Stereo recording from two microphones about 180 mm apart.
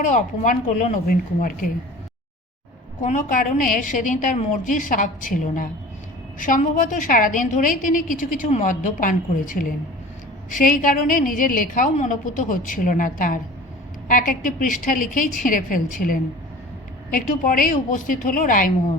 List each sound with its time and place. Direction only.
0.0 s a woman's voice: 45° left (ahead or behind)
3.0 s a woman's voice: 45° left (ahead or behind)